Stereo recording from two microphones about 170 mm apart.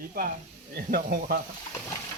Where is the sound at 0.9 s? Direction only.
65° right (ahead or behind).